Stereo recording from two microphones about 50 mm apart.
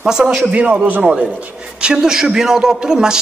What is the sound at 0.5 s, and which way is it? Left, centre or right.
Speech, right.